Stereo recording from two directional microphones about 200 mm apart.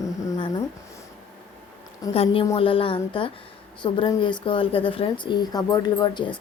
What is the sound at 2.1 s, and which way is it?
A woman's voice, 30° left (ahead or behind).